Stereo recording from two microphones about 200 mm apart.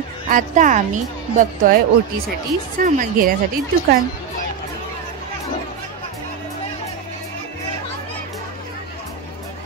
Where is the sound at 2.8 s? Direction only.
40° right (ahead or behind).